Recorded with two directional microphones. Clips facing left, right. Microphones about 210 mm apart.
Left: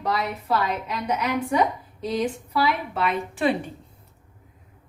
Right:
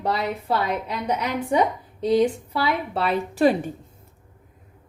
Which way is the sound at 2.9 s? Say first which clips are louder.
Right 2 dB; 35° right (ahead or behind).